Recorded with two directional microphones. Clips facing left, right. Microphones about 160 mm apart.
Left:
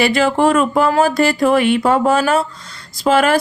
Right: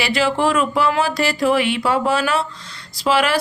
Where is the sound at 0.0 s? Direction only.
50° left (ahead or behind).